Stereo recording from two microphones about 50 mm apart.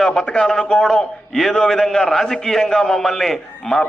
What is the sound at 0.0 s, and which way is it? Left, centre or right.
A man's voice, left.